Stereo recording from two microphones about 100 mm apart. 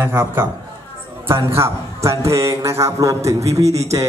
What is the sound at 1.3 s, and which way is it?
A man's voice, 25° right (ahead or behind).